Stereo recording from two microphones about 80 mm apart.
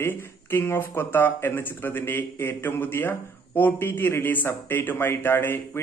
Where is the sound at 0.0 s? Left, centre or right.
Left.